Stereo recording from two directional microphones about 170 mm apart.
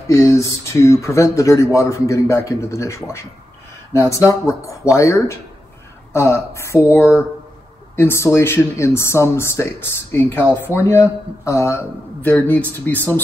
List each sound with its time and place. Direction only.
0.1 s speech: 15° left (ahead or behind)